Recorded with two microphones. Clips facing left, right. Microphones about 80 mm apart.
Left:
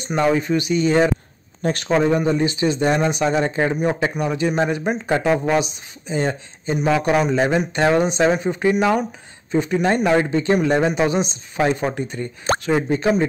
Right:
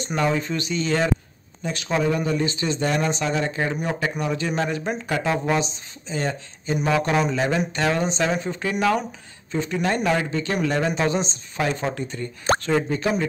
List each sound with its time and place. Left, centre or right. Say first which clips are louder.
0.0 s speech: left 4 dB; centre
1.6 s speech: left 7 dB; left
1.9 s speech: left 4 dB; left
6.8 s speech: left 3 dB; centre
12.5 s speech: left 3 dB; centre